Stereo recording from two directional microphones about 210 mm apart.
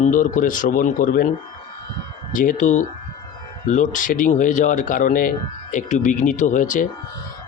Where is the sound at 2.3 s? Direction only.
40° left (ahead or behind).